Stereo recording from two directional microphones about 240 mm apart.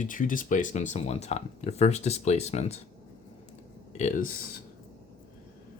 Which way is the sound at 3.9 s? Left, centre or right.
Left.